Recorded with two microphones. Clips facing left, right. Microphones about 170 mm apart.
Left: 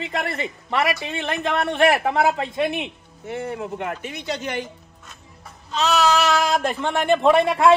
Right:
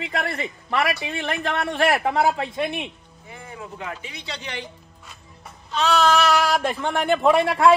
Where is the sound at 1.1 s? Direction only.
25° left (ahead or behind).